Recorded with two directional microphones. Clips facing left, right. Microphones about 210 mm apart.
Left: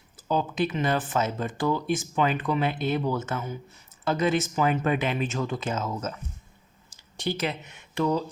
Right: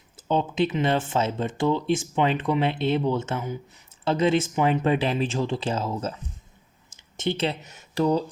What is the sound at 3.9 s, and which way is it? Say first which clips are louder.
Speech: right 3 dB; 25° right (ahead or behind).